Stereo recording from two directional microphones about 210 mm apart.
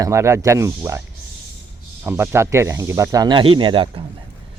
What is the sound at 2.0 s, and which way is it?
Speech, 10° right (ahead or behind).